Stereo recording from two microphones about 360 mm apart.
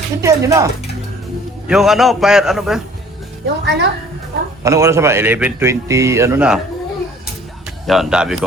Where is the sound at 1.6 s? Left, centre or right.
Centre.